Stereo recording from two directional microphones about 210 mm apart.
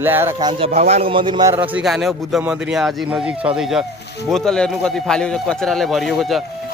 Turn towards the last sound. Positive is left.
turn(degrees=0)  # may be behind; listen again after turning